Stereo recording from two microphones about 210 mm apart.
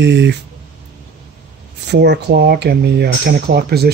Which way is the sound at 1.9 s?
55° right (ahead or behind).